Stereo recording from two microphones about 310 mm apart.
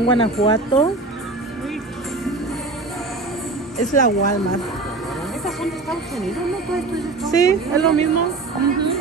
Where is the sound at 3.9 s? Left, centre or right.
Left.